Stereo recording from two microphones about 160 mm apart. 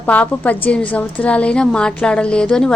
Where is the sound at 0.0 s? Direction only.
10° left (ahead or behind).